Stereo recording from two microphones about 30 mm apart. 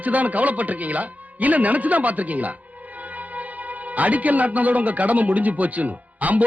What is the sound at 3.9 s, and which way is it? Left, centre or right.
Speech, right.